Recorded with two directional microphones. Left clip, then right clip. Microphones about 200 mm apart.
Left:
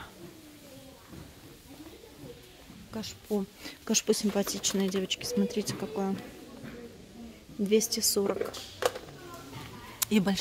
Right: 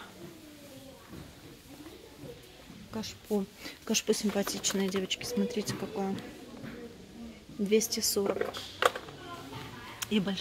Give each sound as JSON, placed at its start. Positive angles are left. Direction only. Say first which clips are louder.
{"t": 2.9, "sound": "speech", "louder": "even", "side_deg": 10}
{"t": 3.8, "sound": "speech", "louder": "left 2 dB", "side_deg": 20}
{"t": 7.7, "sound": "speech", "louder": "left 1 dB", "side_deg": 20}
{"t": 9.9, "sound": "a sound", "louder": "left 4 dB", "side_deg": 30}